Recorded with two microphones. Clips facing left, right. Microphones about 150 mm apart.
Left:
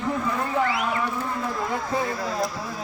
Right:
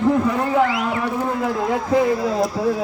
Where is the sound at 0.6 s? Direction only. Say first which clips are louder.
Right 5 dB; 90° right.